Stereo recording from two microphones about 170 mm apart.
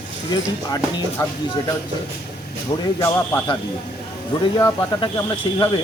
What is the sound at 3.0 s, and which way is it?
Speech, 15° left (ahead or behind).